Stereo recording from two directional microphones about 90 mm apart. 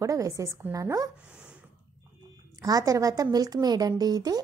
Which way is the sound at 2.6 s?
40° right (ahead or behind).